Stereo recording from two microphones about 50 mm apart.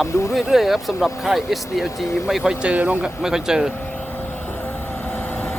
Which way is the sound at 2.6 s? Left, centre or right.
Right.